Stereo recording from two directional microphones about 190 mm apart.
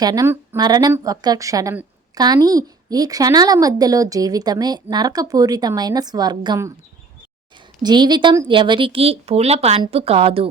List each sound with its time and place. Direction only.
0.0 s a woman's voice: 20° right (ahead or behind)
7.8 s a woman's voice: 20° right (ahead or behind)